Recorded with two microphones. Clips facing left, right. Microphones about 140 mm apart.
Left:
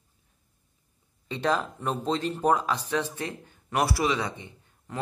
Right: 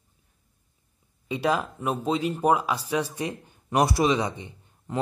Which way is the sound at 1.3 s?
10° right (ahead or behind).